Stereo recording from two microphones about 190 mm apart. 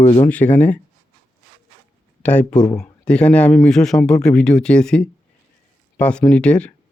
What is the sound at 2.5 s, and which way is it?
Speech, 20° left (ahead or behind).